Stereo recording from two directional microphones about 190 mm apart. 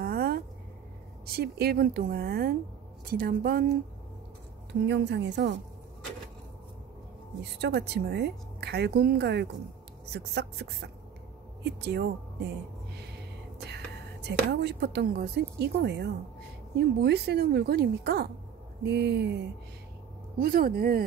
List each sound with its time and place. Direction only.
0.0 s a sound: 55° right (ahead or behind)
1.2 s a woman's voice: 55° right (ahead or behind)
4.8 s a woman's voice: 65° right (ahead or behind)
7.6 s speech: 60° right (ahead or behind)
13.7 s speech: 60° right (ahead or behind)
20.3 s a woman's voice: 50° right (ahead or behind)